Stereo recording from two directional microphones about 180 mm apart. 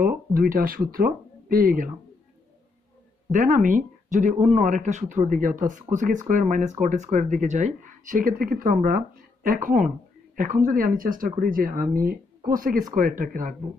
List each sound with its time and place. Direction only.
0.3 s speech: 50° right (ahead or behind)
3.3 s speech: 45° right (ahead or behind)